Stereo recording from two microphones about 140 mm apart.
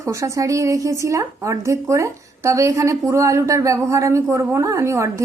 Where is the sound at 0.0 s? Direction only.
20° right (ahead or behind).